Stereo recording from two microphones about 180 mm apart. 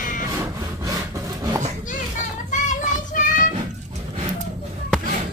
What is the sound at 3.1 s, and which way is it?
Music, 45° left (ahead or behind).